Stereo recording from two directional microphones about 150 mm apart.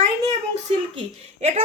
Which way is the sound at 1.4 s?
45° right (ahead or behind).